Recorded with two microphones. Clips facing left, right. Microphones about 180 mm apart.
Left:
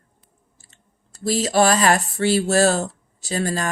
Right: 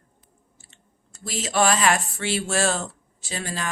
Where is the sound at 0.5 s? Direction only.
40° left (ahead or behind).